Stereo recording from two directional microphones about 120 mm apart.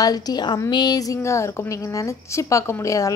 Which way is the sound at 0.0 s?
35° left (ahead or behind).